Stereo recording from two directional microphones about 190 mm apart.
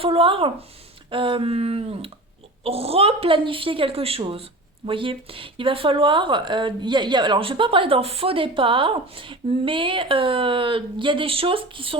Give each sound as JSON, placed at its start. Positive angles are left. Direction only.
{"t": 0.0, "sound": "a woman's voice", "side_deg": -30}